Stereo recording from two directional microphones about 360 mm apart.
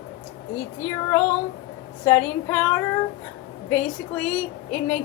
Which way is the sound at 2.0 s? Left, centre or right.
Centre.